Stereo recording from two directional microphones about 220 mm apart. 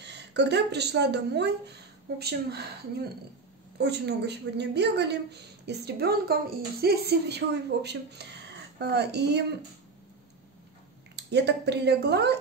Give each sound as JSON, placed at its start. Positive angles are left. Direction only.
{"t": 0.0, "sound": "a woman's voice", "side_deg": -50}
{"t": 11.1, "sound": "a woman's voice", "side_deg": -50}